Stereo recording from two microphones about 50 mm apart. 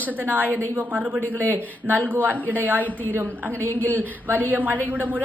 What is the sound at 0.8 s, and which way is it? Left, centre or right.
Speech, right.